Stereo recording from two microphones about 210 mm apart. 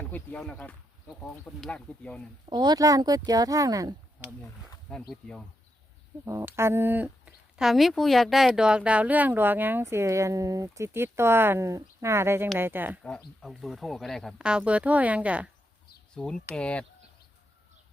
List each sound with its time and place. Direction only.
0.1 s speech: 5° left (ahead or behind)
2.5 s speech: 20° right (ahead or behind)
4.9 s speech: centre (ahead or behind)
6.2 s speech: 10° right (ahead or behind)
16.1 s speech: 5° left (ahead or behind)